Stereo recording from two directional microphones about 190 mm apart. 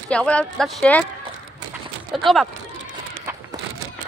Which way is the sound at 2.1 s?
Centre (ahead or behind).